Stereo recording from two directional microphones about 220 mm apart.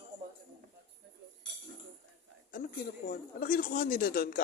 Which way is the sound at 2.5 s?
40° left (ahead or behind).